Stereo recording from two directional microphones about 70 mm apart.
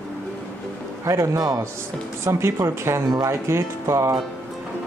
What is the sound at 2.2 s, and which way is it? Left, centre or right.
Speech, right.